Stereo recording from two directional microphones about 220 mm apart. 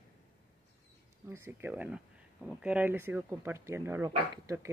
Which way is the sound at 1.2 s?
10° right (ahead or behind).